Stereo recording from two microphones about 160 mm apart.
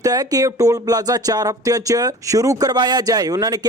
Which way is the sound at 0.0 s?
20° right (ahead or behind).